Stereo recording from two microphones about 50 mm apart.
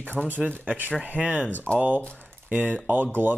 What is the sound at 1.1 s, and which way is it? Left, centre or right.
Speech, right.